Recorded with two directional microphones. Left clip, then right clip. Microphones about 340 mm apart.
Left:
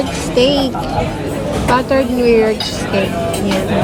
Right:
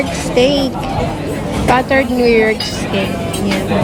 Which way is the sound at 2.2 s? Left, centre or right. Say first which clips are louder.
Left 1 dB; centre.